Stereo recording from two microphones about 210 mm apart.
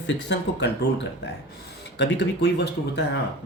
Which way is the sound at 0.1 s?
55° left (ahead or behind).